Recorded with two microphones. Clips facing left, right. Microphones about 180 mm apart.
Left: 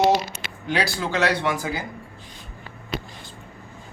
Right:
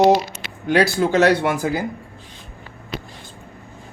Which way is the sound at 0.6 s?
50° right (ahead or behind).